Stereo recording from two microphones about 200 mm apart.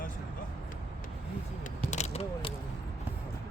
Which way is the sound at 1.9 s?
35° left (ahead or behind).